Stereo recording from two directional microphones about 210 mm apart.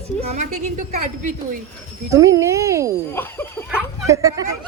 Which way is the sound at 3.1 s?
10° left (ahead or behind).